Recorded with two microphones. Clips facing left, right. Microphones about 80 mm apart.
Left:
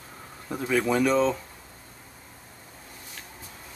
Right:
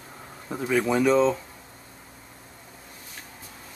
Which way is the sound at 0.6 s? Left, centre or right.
Centre.